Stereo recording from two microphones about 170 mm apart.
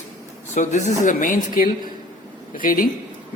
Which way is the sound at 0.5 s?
45° left (ahead or behind).